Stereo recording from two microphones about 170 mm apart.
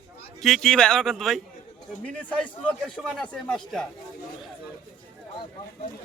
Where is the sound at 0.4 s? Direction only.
Centre (ahead or behind).